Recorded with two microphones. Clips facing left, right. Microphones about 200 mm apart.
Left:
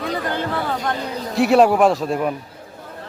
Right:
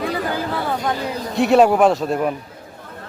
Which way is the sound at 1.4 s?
Centre (ahead or behind).